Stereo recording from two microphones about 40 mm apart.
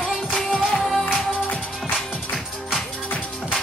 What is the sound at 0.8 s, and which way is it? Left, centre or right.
Music, centre.